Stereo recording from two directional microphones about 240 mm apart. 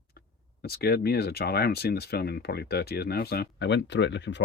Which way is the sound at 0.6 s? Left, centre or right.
Left.